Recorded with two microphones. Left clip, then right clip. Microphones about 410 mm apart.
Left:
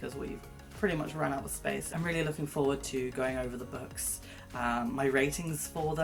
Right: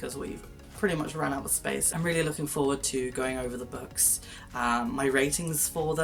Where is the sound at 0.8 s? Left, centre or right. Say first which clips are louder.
Right 3 dB; left.